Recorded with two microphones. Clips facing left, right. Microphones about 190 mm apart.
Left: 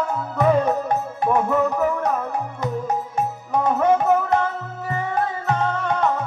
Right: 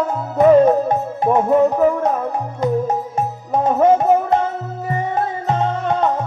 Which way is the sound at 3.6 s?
25° right (ahead or behind).